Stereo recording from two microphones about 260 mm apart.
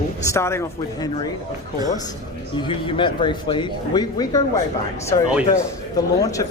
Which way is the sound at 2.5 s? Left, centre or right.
Centre.